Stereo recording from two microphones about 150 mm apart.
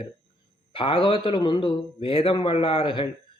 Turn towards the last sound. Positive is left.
turn(degrees=35)  # may be behind; listen again after turning